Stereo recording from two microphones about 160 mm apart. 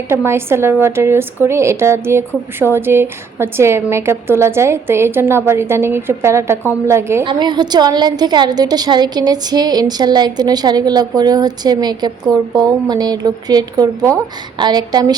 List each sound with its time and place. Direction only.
0.3 s a woman's voice: 15° right (ahead or behind)
7.3 s a woman's voice: 25° right (ahead or behind)